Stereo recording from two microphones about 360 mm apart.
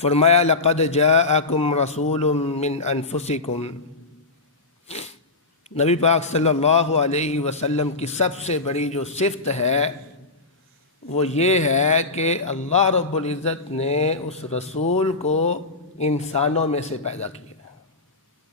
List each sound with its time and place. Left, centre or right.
0.0 s speech: centre
4.9 s sneeze: centre
5.6 s speech: centre
11.1 s speech: centre